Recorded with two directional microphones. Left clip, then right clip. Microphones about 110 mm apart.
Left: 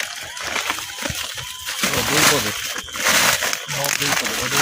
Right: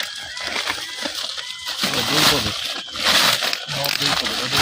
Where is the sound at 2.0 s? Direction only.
25° left (ahead or behind).